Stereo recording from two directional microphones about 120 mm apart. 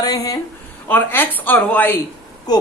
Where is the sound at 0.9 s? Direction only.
15° left (ahead or behind).